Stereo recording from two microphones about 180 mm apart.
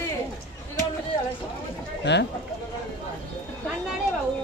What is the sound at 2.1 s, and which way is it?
Speech, 75° left (ahead or behind).